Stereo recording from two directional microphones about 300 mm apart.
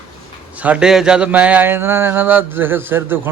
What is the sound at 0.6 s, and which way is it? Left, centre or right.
Speech, centre.